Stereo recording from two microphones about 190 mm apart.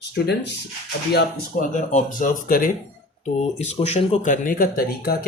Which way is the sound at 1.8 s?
40° left (ahead or behind).